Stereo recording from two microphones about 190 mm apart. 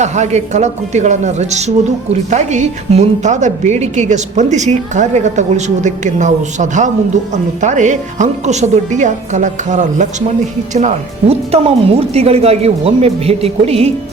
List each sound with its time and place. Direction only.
0.0 s a woman's voice: 35° right (ahead or behind)